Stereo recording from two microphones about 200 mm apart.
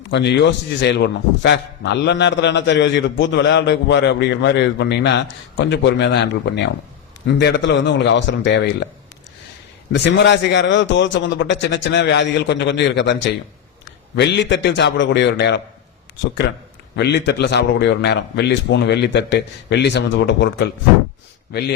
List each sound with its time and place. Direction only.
0.1 s a man's voice: 60° left (ahead or behind)
9.9 s a man's voice: 60° left (ahead or behind)
17.0 s a man's voice: 60° left (ahead or behind)